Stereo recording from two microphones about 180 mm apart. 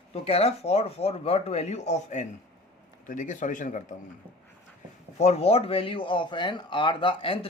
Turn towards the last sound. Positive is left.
turn(degrees=30)  # may be behind; listen again after turning